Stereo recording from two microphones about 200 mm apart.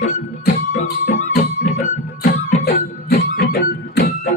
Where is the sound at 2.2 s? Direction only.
50° left (ahead or behind).